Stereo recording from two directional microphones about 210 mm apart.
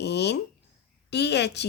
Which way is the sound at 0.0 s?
50° left (ahead or behind).